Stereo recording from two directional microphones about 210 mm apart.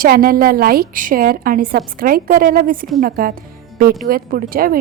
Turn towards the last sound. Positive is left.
turn(degrees=-45)  # may be behind; listen again after turning